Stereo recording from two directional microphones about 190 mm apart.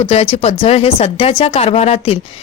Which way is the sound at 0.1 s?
35° left (ahead or behind).